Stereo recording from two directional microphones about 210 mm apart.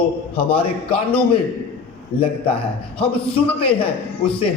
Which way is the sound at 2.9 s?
5° left (ahead or behind).